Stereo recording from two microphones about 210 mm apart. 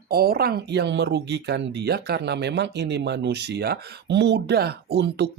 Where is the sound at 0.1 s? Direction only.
45° right (ahead or behind).